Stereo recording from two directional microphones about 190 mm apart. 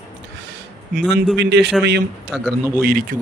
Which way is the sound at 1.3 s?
65° right (ahead or behind).